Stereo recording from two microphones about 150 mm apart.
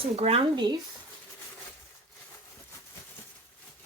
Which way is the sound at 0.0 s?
40° right (ahead or behind).